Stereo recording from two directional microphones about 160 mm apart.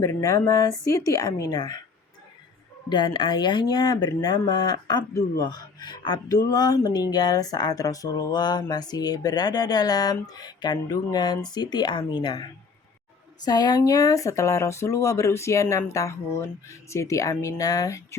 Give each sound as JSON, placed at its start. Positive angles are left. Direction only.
{"t": 0.0, "sound": "speech", "side_deg": 20}
{"t": 2.9, "sound": "speech", "side_deg": 30}